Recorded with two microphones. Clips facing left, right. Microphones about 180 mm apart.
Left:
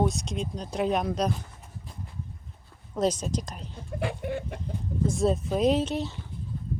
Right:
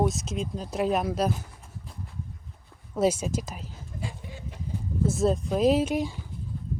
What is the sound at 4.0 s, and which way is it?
Chicken, 65° left (ahead or behind).